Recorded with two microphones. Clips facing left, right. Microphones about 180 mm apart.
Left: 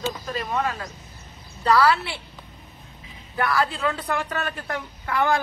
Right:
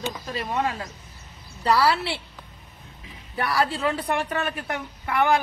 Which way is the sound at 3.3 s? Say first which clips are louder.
Left 1 dB; 30° right (ahead or behind).